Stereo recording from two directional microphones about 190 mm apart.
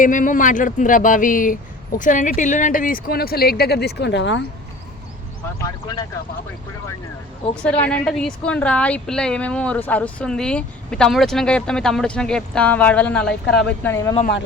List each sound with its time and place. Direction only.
0.0 s speech: 45° left (ahead or behind); by 4.4 s 70° left (ahead or behind)
5.5 s speech: 20° left (ahead or behind)
7.6 s speech: 5° left (ahead or behind)